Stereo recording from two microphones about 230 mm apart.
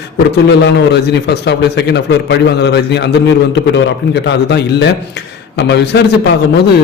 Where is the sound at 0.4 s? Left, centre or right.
Left.